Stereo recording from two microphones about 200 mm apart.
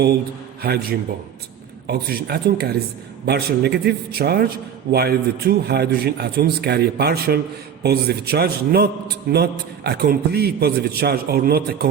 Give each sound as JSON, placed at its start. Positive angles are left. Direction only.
{"t": 0.6, "sound": "a man's voice", "side_deg": -50}